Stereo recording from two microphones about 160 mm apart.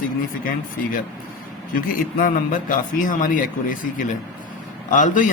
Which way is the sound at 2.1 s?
60° left (ahead or behind).